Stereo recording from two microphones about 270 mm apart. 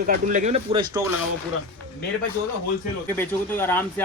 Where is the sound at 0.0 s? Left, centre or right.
Right.